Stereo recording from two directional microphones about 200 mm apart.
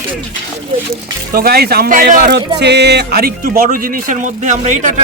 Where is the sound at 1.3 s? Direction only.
50° right (ahead or behind).